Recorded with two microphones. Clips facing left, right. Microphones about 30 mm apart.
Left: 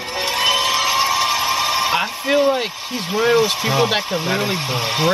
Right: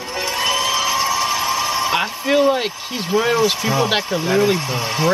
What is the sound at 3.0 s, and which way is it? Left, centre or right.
Speech, centre.